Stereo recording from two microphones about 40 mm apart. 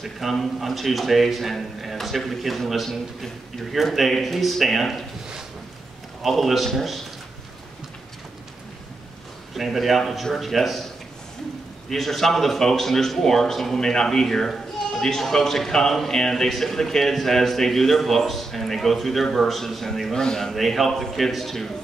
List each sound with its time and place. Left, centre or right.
0.0 s a man's voice: centre
6.2 s a man's voice: centre
9.5 s a man's voice: centre
11.9 s a man's voice: centre
20.5 s a man's voice: centre